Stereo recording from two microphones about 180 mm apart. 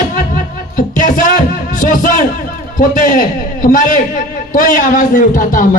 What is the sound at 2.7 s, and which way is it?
A man's voice, 45° left (ahead or behind).